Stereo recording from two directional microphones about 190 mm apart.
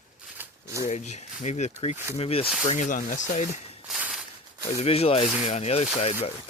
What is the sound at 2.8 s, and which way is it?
Speech, 45° left (ahead or behind).